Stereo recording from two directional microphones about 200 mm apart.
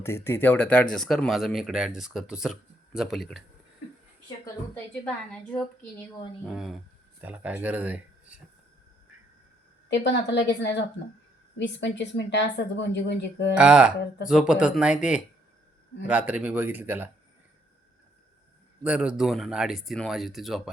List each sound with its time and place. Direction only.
0.0 s speech: 10° left (ahead or behind)
5.0 s speech: 5° left (ahead or behind)
9.9 s a woman's voice: 60° left (ahead or behind)
13.6 s speech: 5° right (ahead or behind)
18.8 s speech: 5° right (ahead or behind)